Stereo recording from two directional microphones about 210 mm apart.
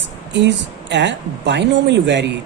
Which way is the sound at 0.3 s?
55° right (ahead or behind).